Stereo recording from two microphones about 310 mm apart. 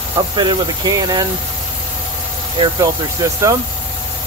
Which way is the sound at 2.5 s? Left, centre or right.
Centre.